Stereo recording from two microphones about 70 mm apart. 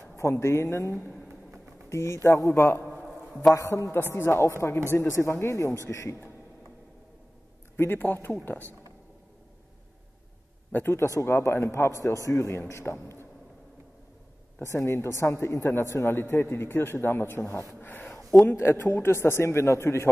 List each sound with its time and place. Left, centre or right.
0.1 s a man's voice: left
7.7 s a man's voice: left
10.7 s a man's voice: left
14.6 s a man's voice: left
18.5 s a man's voice: left